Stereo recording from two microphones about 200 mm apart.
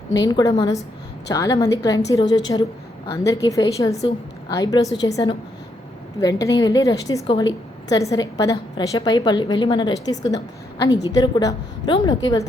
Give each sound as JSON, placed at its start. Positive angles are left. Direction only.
{"t": 0.1, "sound": "a woman's voice", "side_deg": 20}